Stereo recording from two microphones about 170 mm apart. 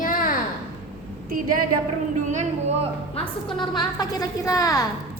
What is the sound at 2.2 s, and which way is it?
Speech, 40° right (ahead or behind).